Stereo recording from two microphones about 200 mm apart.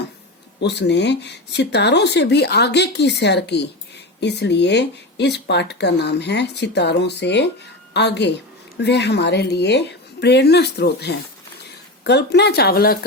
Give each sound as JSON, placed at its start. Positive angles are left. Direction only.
{"t": 0.6, "sound": "speech", "side_deg": 60}